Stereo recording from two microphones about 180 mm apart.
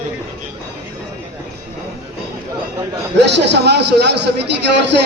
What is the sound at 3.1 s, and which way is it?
A man's voice, 75° right (ahead or behind).